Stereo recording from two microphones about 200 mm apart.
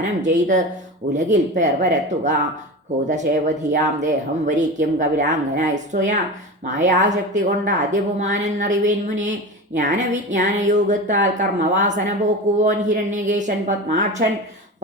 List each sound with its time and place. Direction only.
0.2 s speech: 40° right (ahead or behind)